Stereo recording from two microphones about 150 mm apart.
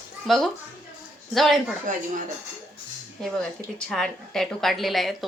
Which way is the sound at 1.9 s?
60° right (ahead or behind).